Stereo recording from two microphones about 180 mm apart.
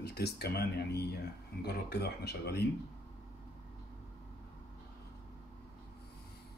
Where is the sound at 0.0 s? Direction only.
65° left (ahead or behind).